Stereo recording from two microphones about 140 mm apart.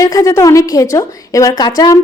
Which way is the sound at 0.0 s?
25° left (ahead or behind).